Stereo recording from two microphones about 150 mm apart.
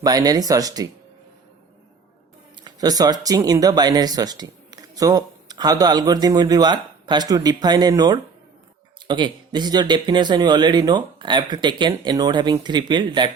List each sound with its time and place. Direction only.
0.0 s speech: 25° right (ahead or behind)
2.6 s speech: 25° right (ahead or behind)